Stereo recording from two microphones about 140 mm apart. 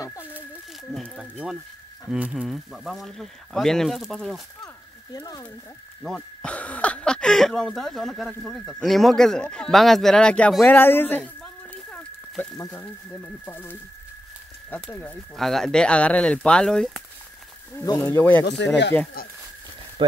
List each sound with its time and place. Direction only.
0.0 s a sound: 25° left (ahead or behind)
0.9 s a sound: centre (ahead or behind)
1.2 s speech: 5° right (ahead or behind)
5.1 s speech: 25° left (ahead or behind)
6.0 s speech: 5° left (ahead or behind)
11.9 s a sound: 5° left (ahead or behind)
12.5 s speech: 15° left (ahead or behind)
17.8 s speech: 20° left (ahead or behind)
20.0 s speech: 35° right (ahead or behind)